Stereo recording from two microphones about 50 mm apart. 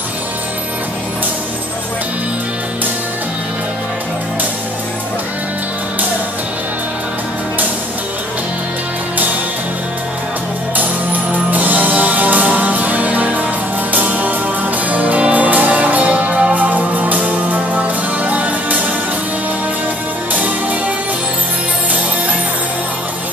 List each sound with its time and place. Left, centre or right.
11.3 s music: right
16.5 s music: right